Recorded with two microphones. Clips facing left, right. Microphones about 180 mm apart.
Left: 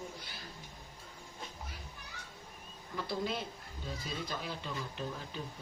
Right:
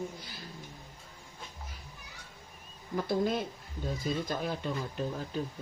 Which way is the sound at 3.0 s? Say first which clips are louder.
Right 7 dB; 50° right (ahead or behind).